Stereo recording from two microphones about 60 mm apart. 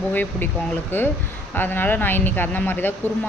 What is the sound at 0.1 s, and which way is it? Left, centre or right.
Speech, left.